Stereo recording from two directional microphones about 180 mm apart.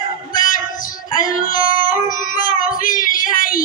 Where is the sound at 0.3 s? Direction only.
50° left (ahead or behind).